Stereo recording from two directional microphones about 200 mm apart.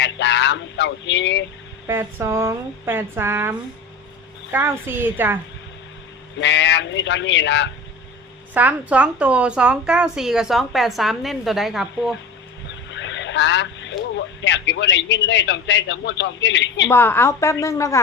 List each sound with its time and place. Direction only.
0.0 s a sound: 60° left (ahead or behind)
1.9 s speech: 10° right (ahead or behind)
4.5 s speech: 10° right (ahead or behind)
6.4 s speech: 60° left (ahead or behind)
8.5 s speech: 5° right (ahead or behind)
12.9 s speech: 65° left (ahead or behind)
16.9 s a woman's voice: 10° left (ahead or behind)